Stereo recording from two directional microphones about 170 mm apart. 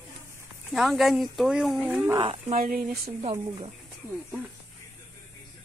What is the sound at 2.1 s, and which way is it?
Speech, 35° right (ahead or behind).